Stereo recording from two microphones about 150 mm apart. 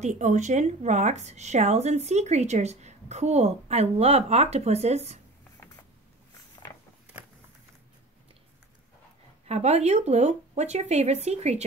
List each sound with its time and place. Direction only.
0.0 s a woman's voice: 50° right (ahead or behind)
6.6 s a sound: 35° left (ahead or behind)
9.5 s a woman's voice: 45° right (ahead or behind)